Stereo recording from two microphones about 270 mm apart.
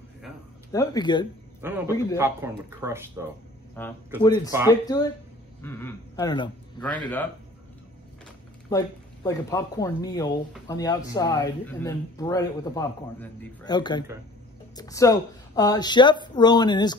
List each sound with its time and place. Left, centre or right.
0.7 s speech: centre
1.6 s a man's voice: centre
3.8 s speech: centre
4.5 s speech: centre
4.8 s speech: centre
8.6 s speech: centre